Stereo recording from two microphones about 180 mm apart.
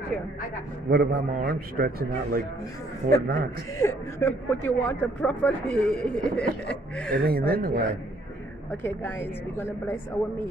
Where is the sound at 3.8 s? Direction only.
15° left (ahead or behind).